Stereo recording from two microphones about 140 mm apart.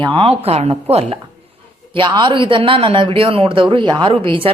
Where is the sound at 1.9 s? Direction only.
35° right (ahead or behind).